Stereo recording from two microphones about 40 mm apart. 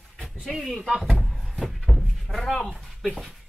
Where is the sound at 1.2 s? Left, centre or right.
Centre.